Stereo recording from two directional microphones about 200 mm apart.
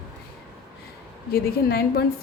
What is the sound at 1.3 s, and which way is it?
Speech, 50° left (ahead or behind).